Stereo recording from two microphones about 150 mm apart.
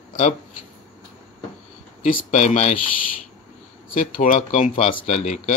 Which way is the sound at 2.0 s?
55° left (ahead or behind).